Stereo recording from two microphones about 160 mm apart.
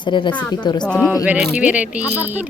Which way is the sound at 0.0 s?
30° left (ahead or behind).